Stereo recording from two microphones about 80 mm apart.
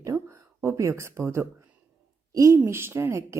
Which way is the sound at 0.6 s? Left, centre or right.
Right.